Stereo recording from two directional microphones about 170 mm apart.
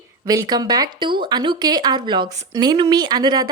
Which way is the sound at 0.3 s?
25° right (ahead or behind).